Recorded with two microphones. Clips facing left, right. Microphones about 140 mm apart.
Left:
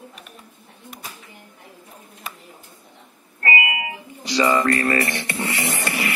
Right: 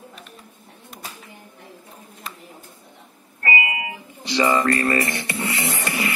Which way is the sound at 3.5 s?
25° right (ahead or behind).